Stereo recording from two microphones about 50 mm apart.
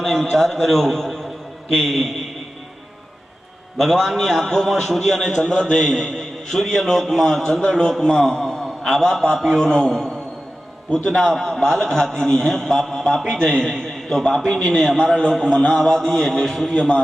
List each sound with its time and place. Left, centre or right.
0.0 s a man's voice: centre
3.8 s a man's voice: centre
5.5 s a man's voice: centre
5.8 s a man's voice: centre
7.6 s a man's voice: centre
11.1 s a man's voice: centre